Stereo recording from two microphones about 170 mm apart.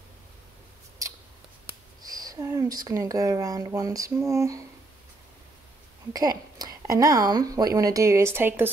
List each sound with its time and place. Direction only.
1.7 s speech: 20° right (ahead or behind)
6.1 s speech: 20° right (ahead or behind)